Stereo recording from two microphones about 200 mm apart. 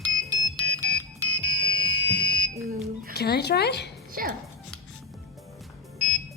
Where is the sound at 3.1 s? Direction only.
55° left (ahead or behind).